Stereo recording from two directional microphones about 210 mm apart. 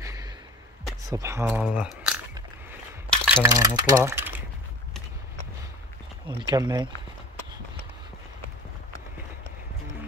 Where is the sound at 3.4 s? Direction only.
15° right (ahead or behind).